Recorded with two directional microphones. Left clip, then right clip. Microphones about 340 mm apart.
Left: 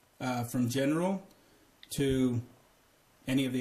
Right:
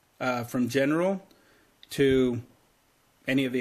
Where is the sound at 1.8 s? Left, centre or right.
Centre.